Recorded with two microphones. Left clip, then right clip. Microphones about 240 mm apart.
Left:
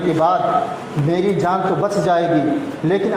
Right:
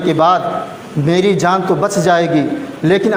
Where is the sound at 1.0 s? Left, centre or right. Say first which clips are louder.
Right 5 dB; right.